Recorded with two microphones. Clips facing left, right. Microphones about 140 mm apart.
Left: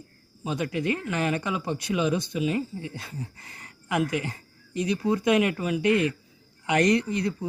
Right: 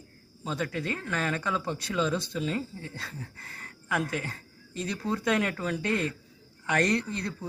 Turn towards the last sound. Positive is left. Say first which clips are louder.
# left 6 dB
turn(degrees=15)  # may be behind; listen again after turning